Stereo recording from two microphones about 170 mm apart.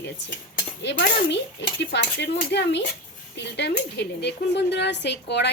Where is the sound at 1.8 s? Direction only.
85° left.